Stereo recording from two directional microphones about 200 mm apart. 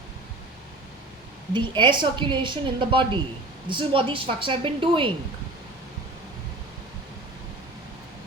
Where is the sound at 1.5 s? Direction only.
25° right (ahead or behind).